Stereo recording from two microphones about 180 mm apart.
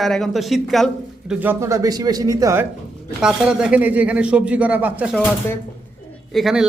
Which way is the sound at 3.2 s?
5° right (ahead or behind).